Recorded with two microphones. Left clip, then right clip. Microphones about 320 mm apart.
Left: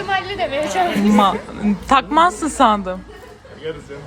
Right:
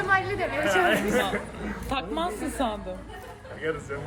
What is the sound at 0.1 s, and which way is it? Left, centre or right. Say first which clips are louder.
Chatter: left 4 dB; left.